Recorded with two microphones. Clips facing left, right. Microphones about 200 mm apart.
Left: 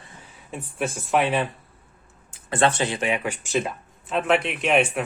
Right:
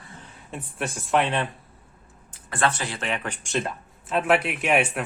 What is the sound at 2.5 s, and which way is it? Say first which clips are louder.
Speech: left 4 dB; 25° left (ahead or behind).